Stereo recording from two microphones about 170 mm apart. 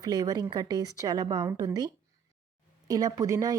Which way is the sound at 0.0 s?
20° right (ahead or behind).